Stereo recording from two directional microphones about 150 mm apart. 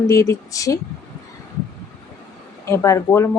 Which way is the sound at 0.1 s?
20° left (ahead or behind).